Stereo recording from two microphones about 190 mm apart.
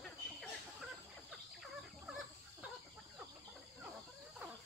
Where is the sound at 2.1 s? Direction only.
5° right (ahead or behind).